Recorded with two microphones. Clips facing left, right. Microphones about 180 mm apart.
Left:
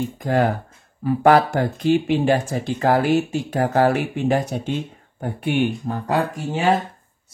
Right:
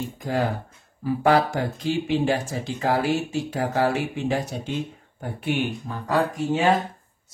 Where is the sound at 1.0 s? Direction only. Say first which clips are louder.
Left 4 dB; 55° left (ahead or behind).